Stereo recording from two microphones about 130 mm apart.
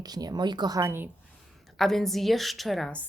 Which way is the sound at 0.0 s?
30° right (ahead or behind).